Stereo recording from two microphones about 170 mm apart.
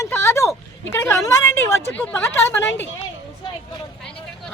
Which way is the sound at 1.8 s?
10° left (ahead or behind).